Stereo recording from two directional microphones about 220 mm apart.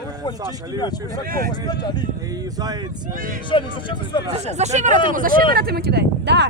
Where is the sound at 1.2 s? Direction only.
40° right (ahead or behind).